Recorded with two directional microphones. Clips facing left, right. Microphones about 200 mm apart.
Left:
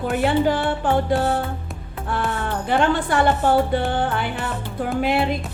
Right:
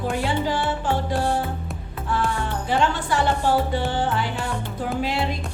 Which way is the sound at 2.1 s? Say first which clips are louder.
Left 1 dB; 55° left (ahead or behind).